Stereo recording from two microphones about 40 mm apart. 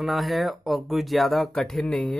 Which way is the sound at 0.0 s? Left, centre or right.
Centre.